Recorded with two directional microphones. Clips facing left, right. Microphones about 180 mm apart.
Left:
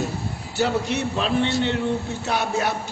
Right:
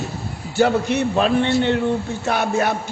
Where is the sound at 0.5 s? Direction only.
55° right (ahead or behind).